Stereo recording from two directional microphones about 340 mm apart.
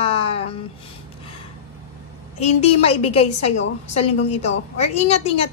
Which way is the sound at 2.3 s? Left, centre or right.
Centre.